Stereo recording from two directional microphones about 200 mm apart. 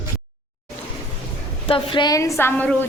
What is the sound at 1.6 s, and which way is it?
A woman's voice, 25° left (ahead or behind).